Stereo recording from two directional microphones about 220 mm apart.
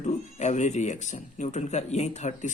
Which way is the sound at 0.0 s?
30° left (ahead or behind).